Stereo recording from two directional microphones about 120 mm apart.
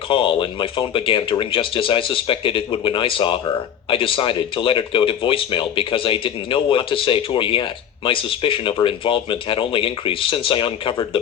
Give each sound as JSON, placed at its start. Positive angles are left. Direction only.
{"t": 0.1, "sound": "speech", "side_deg": 45}